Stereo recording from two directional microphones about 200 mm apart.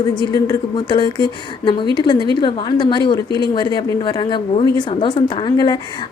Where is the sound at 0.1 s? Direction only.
20° left (ahead or behind).